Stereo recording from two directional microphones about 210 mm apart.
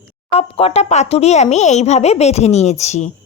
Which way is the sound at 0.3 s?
30° left (ahead or behind).